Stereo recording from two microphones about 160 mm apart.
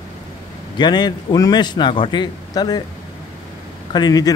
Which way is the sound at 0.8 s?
25° left (ahead or behind).